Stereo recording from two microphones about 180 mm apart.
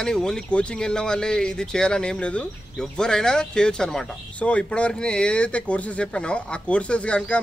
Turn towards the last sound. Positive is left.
turn(degrees=5)  # may be behind; listen again after turning